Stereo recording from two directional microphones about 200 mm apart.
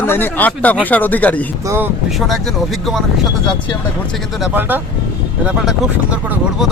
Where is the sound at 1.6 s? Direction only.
10° right (ahead or behind).